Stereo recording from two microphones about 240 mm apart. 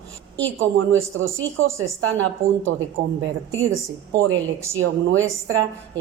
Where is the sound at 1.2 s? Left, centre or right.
Right.